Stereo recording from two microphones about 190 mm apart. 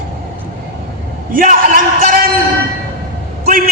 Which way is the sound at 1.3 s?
45° right (ahead or behind).